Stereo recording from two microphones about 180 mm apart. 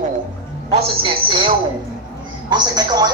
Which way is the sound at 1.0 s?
30° right (ahead or behind).